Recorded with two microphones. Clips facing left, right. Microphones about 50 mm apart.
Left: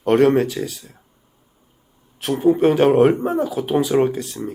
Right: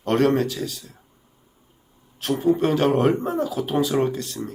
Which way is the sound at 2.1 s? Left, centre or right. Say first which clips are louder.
Left 4 dB; centre.